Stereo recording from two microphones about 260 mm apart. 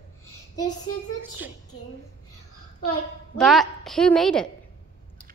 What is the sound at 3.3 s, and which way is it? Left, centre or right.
A woman's voice, centre.